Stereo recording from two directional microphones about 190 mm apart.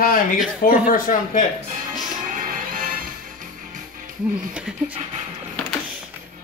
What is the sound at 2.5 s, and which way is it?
Music, 45° right (ahead or behind).